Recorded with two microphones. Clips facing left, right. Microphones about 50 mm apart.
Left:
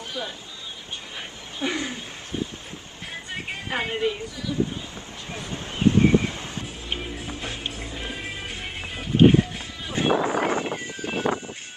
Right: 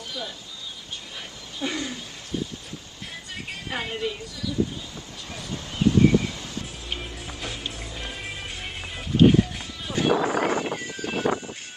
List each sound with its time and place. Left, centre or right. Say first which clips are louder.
1.6 s a sound: left 2 dB; left
3.3 s speech: left 3 dB; left
5.3 s music: left 2 dB; left
7.0 s music: left 3 dB; centre
9.1 s music: left 1 dB; left
9.9 s a sound: even; left